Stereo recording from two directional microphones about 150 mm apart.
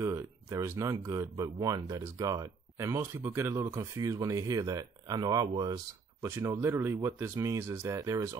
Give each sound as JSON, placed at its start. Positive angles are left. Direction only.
{"t": 0.0, "sound": "speech", "side_deg": -20}